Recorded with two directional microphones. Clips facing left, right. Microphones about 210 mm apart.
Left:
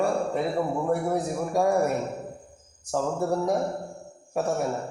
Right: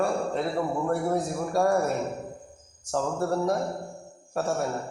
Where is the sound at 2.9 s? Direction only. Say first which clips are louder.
Left 1 dB; 10° left (ahead or behind).